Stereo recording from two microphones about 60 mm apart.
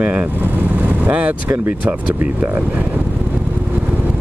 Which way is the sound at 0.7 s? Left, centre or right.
Right.